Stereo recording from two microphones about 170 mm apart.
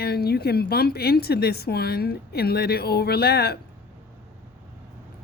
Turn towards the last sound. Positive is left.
turn(degrees=70)  # may be behind; listen again after turning